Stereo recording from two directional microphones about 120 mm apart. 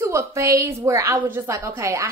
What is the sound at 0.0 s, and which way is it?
A woman's voice, 25° right (ahead or behind).